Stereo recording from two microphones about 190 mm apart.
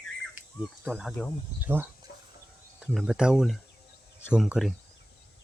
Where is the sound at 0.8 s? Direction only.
Centre (ahead or behind).